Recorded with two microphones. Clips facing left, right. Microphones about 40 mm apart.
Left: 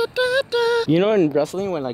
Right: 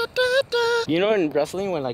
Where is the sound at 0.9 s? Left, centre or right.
Right.